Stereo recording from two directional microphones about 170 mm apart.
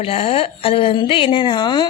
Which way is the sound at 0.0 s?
35° left (ahead or behind).